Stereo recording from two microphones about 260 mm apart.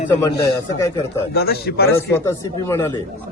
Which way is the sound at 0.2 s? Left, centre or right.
Centre.